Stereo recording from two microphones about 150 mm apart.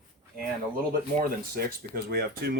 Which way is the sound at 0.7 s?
75° right (ahead or behind).